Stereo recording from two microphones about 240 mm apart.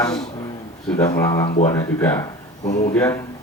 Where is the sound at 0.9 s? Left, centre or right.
Centre.